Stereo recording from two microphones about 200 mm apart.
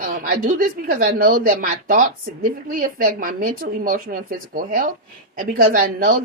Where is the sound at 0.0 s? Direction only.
45° right (ahead or behind).